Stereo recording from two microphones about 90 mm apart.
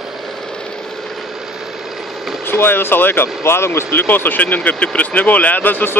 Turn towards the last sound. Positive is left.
turn(degrees=20)  # may be behind; listen again after turning